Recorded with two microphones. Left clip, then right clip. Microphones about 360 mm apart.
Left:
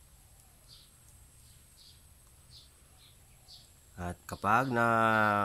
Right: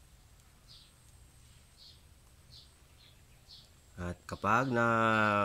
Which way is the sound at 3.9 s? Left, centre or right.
Centre.